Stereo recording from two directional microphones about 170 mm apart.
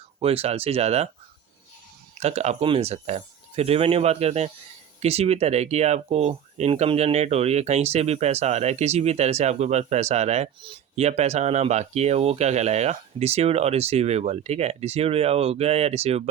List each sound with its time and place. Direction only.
0.2 s speech: 35° right (ahead or behind)
2.1 s speech: 40° right (ahead or behind)